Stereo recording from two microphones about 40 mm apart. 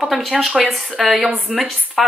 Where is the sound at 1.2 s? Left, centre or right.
Right.